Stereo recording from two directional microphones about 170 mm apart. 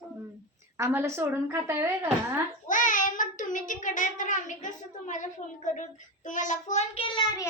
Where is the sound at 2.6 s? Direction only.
50° left (ahead or behind); by 7.3 s 35° left (ahead or behind).